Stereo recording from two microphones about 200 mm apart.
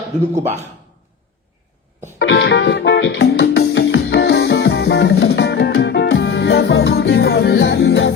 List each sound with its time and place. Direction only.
2.1 s music: 60° left (ahead or behind)